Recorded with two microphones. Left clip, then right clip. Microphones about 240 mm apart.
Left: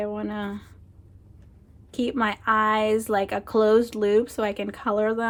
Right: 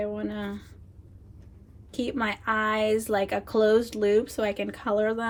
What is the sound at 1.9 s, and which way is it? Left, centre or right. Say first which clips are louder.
A woman's voice: left 4 dB; left.